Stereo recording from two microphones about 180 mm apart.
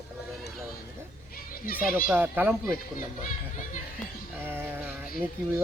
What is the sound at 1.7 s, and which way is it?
Speech, 55° left (ahead or behind).